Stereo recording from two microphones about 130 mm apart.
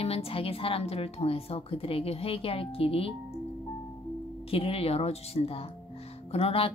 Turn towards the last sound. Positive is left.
turn(degrees=45)  # may be behind; listen again after turning